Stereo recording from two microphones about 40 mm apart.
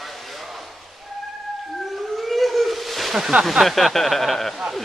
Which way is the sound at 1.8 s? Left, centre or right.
Centre.